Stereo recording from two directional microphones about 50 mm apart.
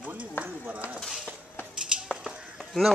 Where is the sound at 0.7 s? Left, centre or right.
Right.